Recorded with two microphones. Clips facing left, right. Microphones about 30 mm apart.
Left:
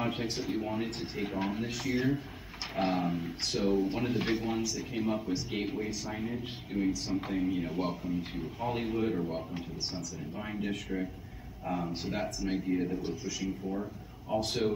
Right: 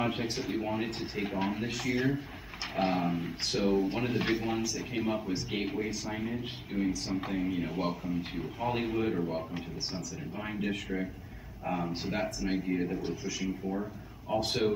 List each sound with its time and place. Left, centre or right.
0.0 s speech: centre
13.0 s speech: centre